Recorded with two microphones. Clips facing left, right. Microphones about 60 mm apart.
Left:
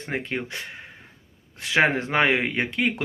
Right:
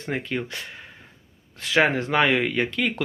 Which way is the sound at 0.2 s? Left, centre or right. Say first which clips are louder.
Right 1 dB; left.